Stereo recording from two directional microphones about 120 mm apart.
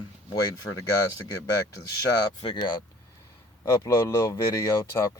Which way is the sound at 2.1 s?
40° left (ahead or behind).